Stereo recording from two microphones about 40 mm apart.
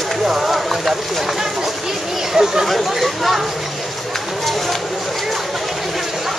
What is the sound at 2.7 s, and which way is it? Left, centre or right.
Speech, centre.